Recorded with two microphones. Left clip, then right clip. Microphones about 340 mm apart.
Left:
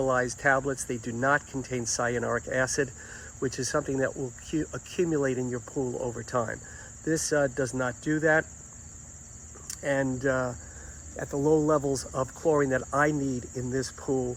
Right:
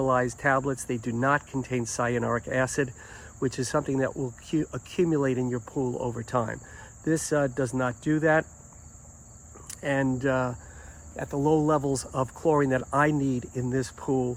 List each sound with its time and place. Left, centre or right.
0.0 s speech: right
9.6 s speech: right